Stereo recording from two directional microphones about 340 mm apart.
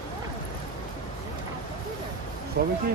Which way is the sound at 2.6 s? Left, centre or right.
Right.